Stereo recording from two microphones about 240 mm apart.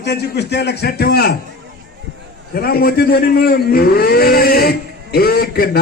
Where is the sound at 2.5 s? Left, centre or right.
Left.